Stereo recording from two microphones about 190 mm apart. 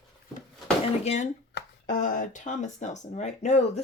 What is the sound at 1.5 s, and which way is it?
Speech, 45° left (ahead or behind).